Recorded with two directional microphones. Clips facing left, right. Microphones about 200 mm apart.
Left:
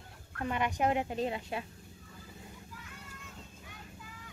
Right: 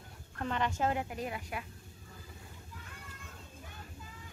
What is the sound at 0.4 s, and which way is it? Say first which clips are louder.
A woman's voice: left 1 dB; 10° left (ahead or behind).